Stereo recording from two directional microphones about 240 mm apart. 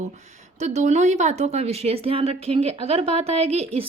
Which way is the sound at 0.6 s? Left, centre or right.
Right.